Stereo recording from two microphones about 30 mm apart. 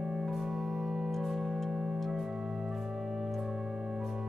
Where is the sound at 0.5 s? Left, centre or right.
Centre.